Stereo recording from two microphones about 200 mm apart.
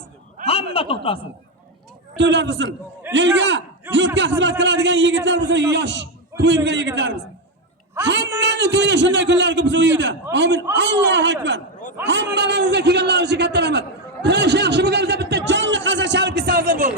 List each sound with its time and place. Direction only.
0.4 s a woman's voice: 30° left (ahead or behind)
2.1 s a man's voice: 65° right (ahead or behind); by 16.9 s 45° right (ahead or behind)